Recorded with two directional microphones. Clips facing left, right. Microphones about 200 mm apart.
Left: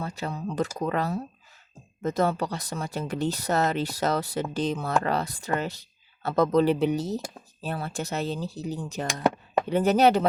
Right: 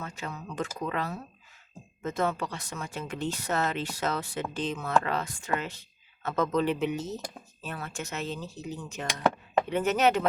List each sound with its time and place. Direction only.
0.0 s speech: 35° left (ahead or behind)